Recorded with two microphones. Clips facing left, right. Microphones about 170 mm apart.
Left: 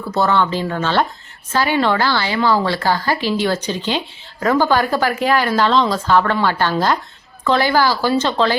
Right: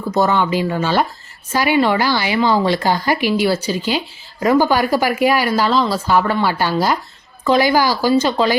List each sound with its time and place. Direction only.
0.1 s a woman's voice: 15° right (ahead or behind)